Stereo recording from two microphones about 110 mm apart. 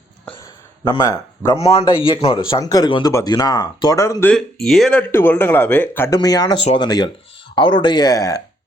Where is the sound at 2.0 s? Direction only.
55° left (ahead or behind).